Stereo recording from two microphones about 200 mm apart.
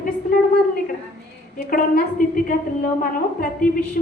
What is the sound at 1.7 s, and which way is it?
A woman's voice, 45° left (ahead or behind).